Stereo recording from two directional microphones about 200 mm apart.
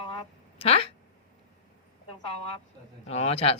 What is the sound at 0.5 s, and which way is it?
Speech, 30° left (ahead or behind).